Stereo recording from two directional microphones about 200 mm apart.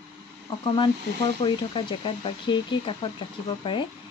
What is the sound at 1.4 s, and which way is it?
Speech, 25° left (ahead or behind).